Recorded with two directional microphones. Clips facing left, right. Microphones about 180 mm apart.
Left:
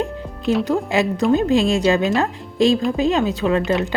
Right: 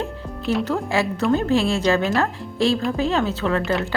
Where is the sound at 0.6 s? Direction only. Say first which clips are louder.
Left 3 dB; 15° left (ahead or behind).